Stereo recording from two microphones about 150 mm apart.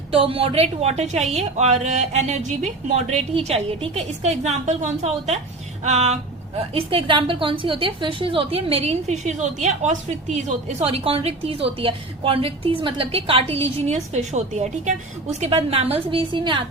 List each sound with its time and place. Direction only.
0.1 s a woman's voice: 40° right (ahead or behind)
6.7 s a woman's voice: 35° right (ahead or behind)